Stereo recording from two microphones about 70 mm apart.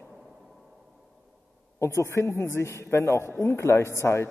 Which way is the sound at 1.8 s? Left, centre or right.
Left.